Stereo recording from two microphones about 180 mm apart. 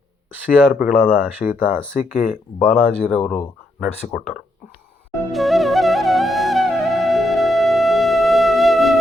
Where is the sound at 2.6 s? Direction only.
5° right (ahead or behind).